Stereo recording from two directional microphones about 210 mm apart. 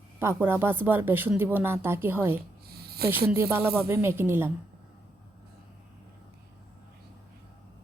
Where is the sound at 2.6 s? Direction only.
45° right (ahead or behind).